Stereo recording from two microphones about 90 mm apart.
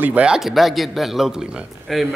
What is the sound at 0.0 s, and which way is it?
Speech, 15° right (ahead or behind).